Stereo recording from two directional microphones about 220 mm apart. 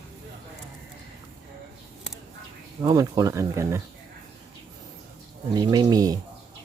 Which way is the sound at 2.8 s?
15° right (ahead or behind).